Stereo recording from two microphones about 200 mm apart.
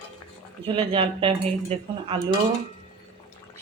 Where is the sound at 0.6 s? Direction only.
25° right (ahead or behind).